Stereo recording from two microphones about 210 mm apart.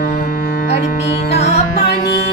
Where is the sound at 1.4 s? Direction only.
30° left (ahead or behind).